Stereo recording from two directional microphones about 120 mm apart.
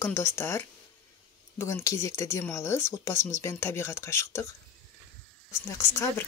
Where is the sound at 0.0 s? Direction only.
20° left (ahead or behind).